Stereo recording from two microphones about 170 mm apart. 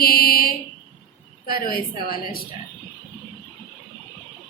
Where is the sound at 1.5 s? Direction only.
60° left (ahead or behind).